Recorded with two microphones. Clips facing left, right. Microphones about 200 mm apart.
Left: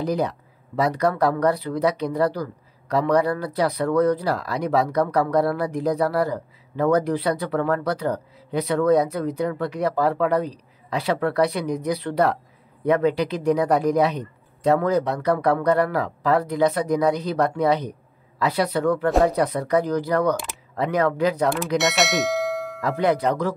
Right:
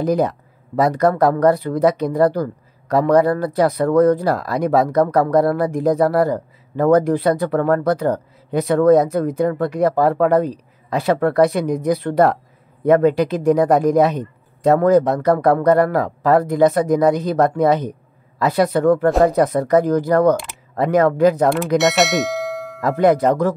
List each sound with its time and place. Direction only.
0.0 s speech: 50° right (ahead or behind)
21.7 s ding: centre (ahead or behind)
22.8 s speech: 50° right (ahead or behind)